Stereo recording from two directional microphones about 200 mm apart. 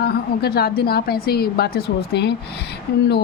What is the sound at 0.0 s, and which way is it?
A woman's voice, 50° left (ahead or behind).